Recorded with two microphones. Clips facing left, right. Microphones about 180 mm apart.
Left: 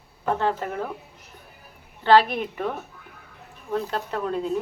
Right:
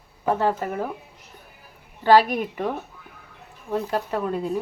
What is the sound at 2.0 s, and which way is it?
Speech, 10° right (ahead or behind).